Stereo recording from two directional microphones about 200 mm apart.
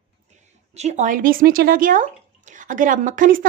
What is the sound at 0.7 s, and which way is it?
Speech, 35° right (ahead or behind).